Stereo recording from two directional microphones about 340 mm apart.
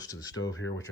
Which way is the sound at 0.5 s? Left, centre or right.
Left.